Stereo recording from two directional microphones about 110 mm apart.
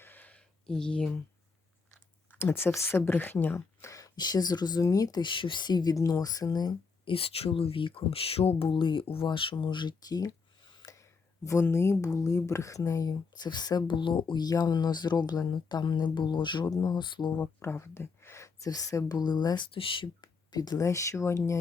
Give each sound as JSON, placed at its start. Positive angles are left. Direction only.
{"t": 0.0, "sound": "a sound", "side_deg": 15}
{"t": 2.3, "sound": "speech", "side_deg": 20}
{"t": 7.1, "sound": "speech", "side_deg": 60}
{"t": 17.4, "sound": "speech", "side_deg": 25}